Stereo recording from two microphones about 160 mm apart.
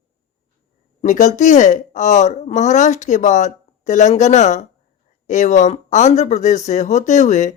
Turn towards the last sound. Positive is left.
turn(degrees=50)  # may be behind; listen again after turning